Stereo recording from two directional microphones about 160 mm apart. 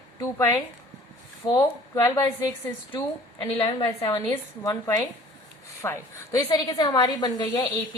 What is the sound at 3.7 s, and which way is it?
A woman's voice, 30° left (ahead or behind).